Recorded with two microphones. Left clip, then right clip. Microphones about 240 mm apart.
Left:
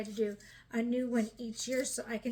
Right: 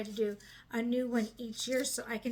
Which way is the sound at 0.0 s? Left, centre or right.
Centre.